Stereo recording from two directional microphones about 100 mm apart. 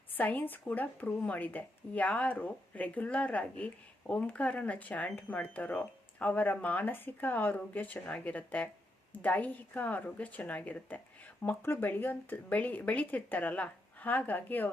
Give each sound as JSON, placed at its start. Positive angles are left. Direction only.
{"t": 0.1, "sound": "a woman's voice", "side_deg": 15}